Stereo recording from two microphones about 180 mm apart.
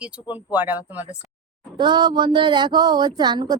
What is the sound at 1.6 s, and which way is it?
Speech, 25° right (ahead or behind).